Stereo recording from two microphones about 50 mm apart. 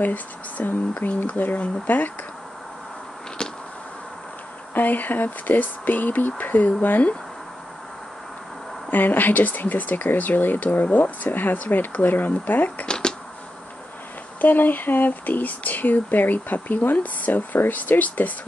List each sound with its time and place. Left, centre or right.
0.0 s speech: left
4.7 s speech: left
8.9 s speech: left
12.8 s shuffling cards: centre
14.4 s speech: left